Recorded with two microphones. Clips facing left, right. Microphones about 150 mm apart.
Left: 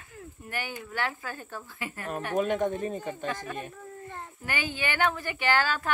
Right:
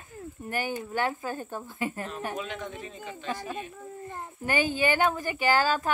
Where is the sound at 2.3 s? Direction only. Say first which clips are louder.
Left 9 dB; 50° left (ahead or behind).